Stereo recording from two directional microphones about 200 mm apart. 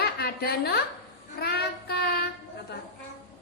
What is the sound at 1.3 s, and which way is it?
Child singing, 50° left (ahead or behind).